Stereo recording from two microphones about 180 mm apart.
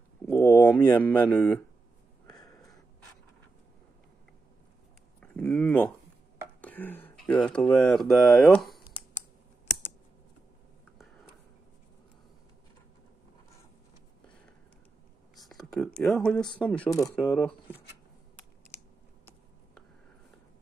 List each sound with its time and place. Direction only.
0.3 s speech: 10° left (ahead or behind)
2.2 s a sound: 20° left (ahead or behind)
5.2 s speech: 10° left (ahead or behind)
15.3 s speech: centre (ahead or behind)